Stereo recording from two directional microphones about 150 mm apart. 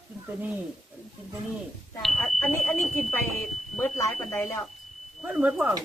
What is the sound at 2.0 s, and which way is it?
Speech, 5° left (ahead or behind).